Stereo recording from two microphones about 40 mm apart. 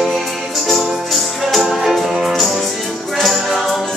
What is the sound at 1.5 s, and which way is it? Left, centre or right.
Music, centre.